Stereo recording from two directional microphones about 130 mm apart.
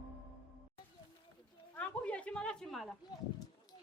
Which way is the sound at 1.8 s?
10° left (ahead or behind).